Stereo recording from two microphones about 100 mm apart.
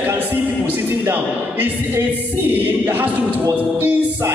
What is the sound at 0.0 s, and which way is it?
Speech, 20° right (ahead or behind).